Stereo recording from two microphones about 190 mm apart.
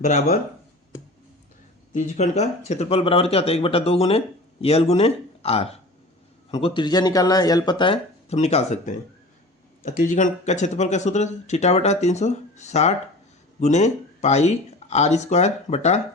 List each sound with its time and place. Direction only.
0.0 s speech: 45° left (ahead or behind)
1.9 s speech: 35° left (ahead or behind)
10.0 s speech: 40° left (ahead or behind)